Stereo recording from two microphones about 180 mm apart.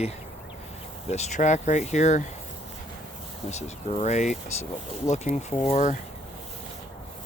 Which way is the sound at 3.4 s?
40° left (ahead or behind).